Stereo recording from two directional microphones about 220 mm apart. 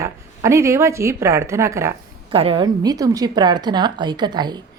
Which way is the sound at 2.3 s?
25° right (ahead or behind).